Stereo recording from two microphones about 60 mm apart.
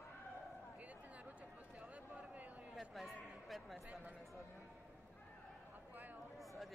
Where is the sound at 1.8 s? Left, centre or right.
Right.